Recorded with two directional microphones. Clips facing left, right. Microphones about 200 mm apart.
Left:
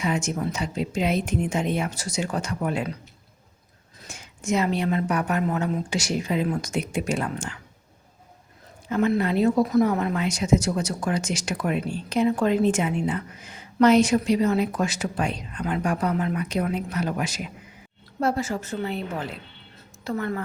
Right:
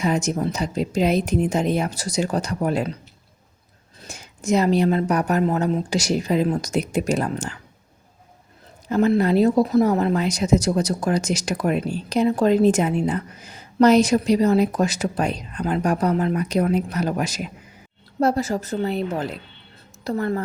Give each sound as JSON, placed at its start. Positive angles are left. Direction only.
{"t": 0.0, "sound": "speech", "side_deg": -40}
{"t": 4.0, "sound": "speech", "side_deg": -35}
{"t": 8.9, "sound": "speech", "side_deg": -35}